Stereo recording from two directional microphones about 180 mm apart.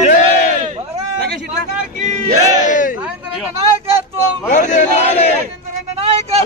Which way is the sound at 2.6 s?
45° left (ahead or behind).